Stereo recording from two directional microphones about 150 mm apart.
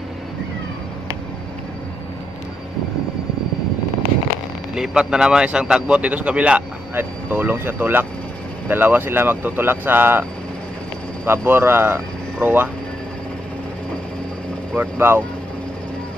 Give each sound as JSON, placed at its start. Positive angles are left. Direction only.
{"t": 4.7, "sound": "speech", "side_deg": -5}
{"t": 11.2, "sound": "speech", "side_deg": -15}
{"t": 14.8, "sound": "speech", "side_deg": -15}